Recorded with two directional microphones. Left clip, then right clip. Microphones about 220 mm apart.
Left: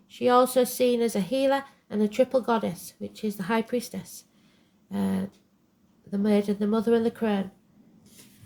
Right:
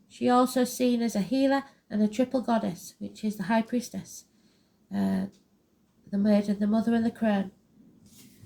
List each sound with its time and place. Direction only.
0.1 s speech: 40° left (ahead or behind)